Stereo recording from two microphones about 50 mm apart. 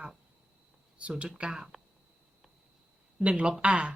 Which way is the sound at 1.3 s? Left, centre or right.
Centre.